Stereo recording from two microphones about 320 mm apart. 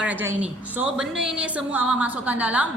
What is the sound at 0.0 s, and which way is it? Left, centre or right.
A woman's voice, centre.